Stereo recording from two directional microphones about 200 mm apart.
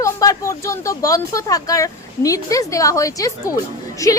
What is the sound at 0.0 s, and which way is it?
A woman's voice, 15° left (ahead or behind).